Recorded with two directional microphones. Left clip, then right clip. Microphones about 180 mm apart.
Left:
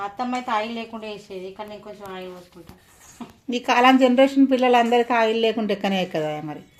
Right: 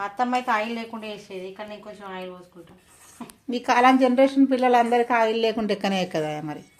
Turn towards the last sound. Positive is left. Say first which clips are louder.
# left 1 dB
turn(degrees=0)  # may be behind; listen again after turning